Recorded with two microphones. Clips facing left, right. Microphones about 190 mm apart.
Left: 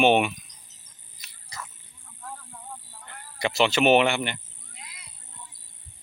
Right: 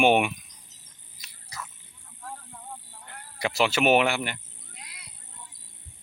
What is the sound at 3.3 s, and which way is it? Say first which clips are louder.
Speech: left 2 dB; 5° right (ahead or behind).